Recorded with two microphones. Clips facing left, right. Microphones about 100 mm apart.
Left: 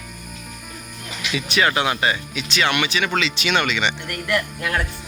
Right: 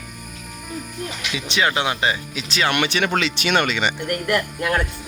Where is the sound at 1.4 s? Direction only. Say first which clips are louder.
Left 1 dB; 25° right (ahead or behind).